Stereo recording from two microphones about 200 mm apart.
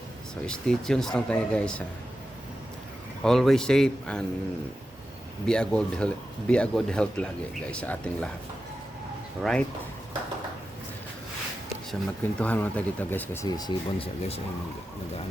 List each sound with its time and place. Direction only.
0.4 s speech: 5° left (ahead or behind)
3.2 s speech: centre (ahead or behind)
5.5 s speech: 5° left (ahead or behind)
9.4 s speech: 5° left (ahead or behind)
12.4 s speech: 10° left (ahead or behind); by 14.4 s 30° left (ahead or behind)